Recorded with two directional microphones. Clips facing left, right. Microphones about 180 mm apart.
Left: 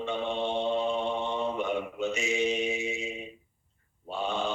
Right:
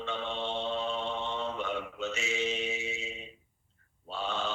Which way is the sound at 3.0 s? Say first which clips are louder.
Left 6 dB; 50° left (ahead or behind).